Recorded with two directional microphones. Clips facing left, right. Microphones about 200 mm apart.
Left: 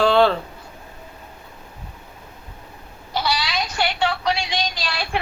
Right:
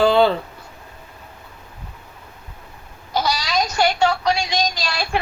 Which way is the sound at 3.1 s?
40° right (ahead or behind).